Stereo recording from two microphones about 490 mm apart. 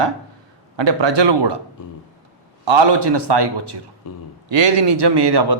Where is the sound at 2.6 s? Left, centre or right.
Right.